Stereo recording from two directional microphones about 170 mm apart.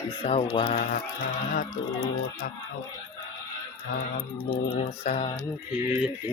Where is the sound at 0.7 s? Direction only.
55° left (ahead or behind).